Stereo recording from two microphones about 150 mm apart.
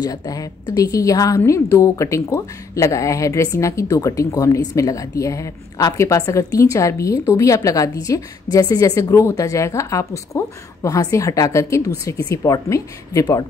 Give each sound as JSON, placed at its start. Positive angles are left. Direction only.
{"t": 0.0, "sound": "a woman's voice", "side_deg": 25}